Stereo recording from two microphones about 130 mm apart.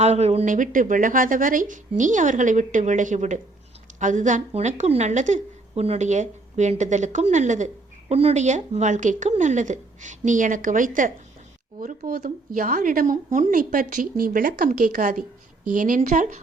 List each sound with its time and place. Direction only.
0.0 s a woman's voice: 55° right (ahead or behind)
0.4 s a woman's voice: 80° right
8.1 s speech: 55° right (ahead or behind); by 11.1 s 90° right
11.8 s speech: 75° right (ahead or behind)
16.0 s speech: 70° right (ahead or behind)